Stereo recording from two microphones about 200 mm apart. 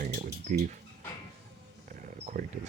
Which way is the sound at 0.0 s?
40° right (ahead or behind).